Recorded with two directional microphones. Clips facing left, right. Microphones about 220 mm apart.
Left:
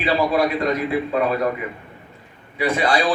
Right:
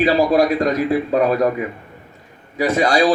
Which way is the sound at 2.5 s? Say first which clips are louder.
Right 4 dB; 40° right (ahead or behind).